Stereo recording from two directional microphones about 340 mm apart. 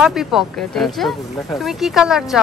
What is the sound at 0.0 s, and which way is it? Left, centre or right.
A child's voice, centre.